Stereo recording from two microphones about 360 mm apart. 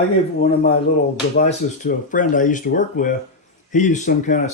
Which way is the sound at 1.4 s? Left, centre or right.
Left.